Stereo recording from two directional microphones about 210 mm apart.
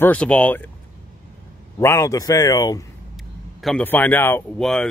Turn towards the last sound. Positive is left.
turn(degrees=5)  # may be behind; listen again after turning